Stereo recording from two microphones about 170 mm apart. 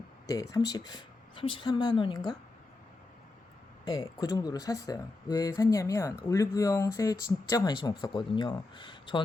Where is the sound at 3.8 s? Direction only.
25° left (ahead or behind).